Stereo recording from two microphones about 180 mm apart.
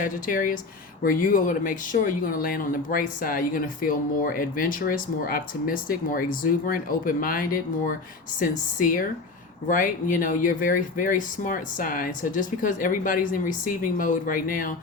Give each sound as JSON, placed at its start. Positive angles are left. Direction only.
{"t": 0.0, "sound": "speech", "side_deg": 50}